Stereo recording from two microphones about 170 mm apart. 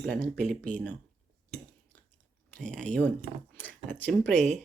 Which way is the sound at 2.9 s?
10° left (ahead or behind).